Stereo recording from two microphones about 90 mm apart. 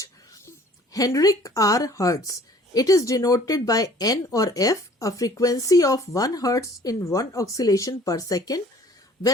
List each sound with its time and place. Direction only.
0.9 s speech: 40° left (ahead or behind)